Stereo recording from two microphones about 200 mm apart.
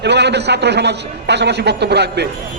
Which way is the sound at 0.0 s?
60° right (ahead or behind).